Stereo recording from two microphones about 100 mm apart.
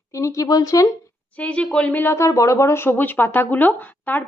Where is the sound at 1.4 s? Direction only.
15° left (ahead or behind).